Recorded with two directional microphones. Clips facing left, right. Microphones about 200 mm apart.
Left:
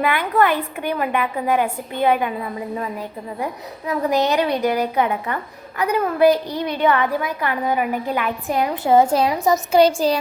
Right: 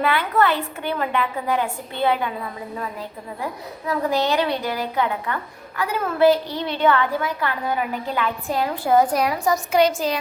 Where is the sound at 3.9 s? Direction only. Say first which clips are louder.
Left 2 dB; 20° left (ahead or behind).